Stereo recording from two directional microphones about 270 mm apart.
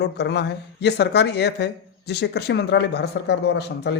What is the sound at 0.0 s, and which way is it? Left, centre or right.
Speech, left.